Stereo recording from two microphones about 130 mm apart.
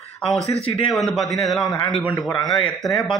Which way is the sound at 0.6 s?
50° left (ahead or behind).